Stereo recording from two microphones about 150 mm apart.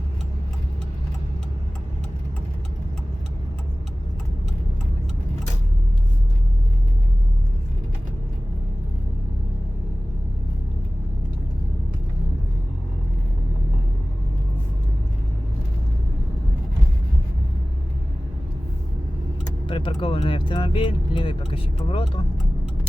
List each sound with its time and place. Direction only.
19.6 s speech: 35° left (ahead or behind)